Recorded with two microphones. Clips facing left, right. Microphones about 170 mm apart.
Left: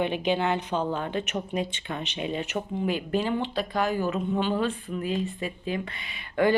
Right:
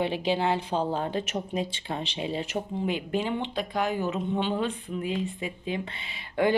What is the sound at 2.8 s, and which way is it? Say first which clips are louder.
Speech: left 3 dB; 20° right (ahead or behind).